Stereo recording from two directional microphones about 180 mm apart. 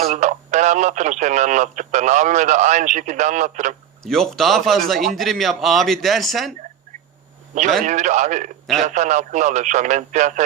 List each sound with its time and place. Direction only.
0.0 s speech: 40° right (ahead or behind)
4.0 s speech: centre (ahead or behind)
7.5 s speech: 40° right (ahead or behind)